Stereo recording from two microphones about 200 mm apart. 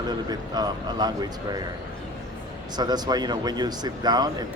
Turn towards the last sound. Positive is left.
turn(degrees=-20)  # may be behind; listen again after turning